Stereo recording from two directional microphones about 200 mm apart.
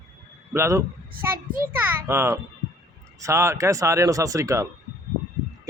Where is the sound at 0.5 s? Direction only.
15° right (ahead or behind).